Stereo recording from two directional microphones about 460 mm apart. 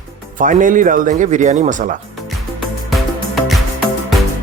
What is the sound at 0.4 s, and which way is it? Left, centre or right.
Speech, centre.